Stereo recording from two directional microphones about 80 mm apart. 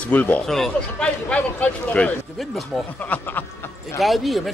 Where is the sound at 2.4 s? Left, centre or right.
Centre.